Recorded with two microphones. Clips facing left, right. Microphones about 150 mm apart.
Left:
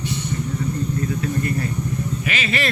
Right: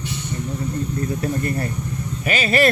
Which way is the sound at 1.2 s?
40° right (ahead or behind).